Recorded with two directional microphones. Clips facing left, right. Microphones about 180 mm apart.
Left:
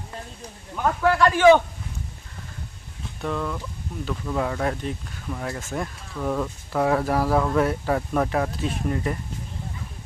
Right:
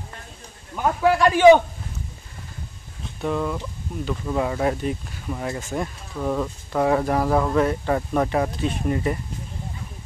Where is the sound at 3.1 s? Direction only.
10° right (ahead or behind).